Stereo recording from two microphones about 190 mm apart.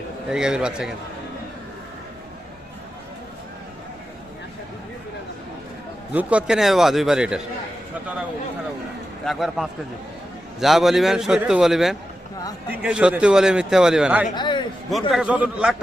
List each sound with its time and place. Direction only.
0.3 s a man's voice: 5° right (ahead or behind)
6.1 s a man's voice: 5° right (ahead or behind)
9.2 s a man's voice: centre (ahead or behind)
14.3 s a man's voice: 25° left (ahead or behind)
15.1 s a man's voice: 5° right (ahead or behind)